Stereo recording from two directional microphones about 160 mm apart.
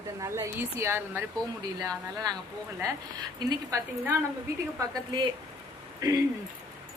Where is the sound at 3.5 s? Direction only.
20° right (ahead or behind).